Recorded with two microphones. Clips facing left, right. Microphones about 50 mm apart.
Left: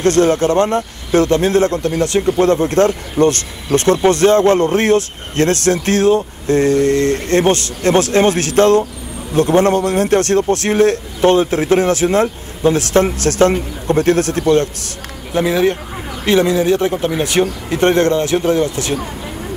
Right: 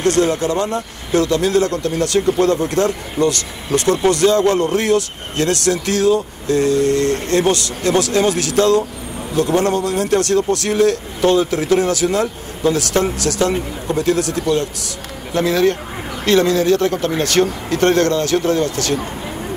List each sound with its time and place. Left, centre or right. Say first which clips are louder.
0.0 s speech: left 3 dB; left
15.3 s speech: left 1 dB; centre